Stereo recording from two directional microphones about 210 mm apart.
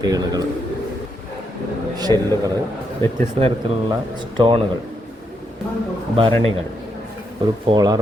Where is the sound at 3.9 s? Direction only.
20° right (ahead or behind).